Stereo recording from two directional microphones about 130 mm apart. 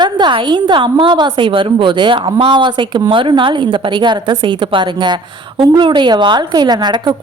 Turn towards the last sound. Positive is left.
turn(degrees=-35)  # may be behind; listen again after turning